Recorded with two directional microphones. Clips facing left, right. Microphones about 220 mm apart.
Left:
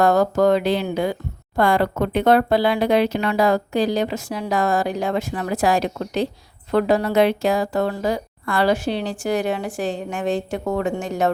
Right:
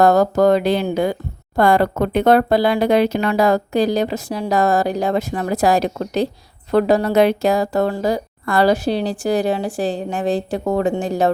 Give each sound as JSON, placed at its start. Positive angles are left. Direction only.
{"t": 0.0, "sound": "speech", "side_deg": -40}